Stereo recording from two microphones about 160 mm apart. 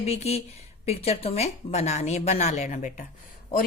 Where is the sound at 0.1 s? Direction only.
40° left (ahead or behind).